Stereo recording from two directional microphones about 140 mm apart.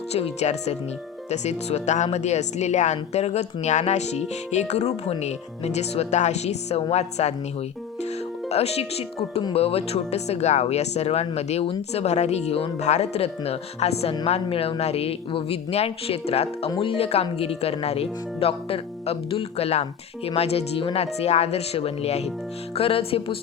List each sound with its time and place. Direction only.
0.1 s speech: 50° left (ahead or behind)
8.4 s speech: 50° left (ahead or behind)